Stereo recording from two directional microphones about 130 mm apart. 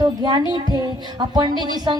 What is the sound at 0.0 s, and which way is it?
Speech, 35° right (ahead or behind).